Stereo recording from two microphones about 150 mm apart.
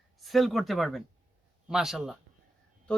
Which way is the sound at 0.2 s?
Centre (ahead or behind).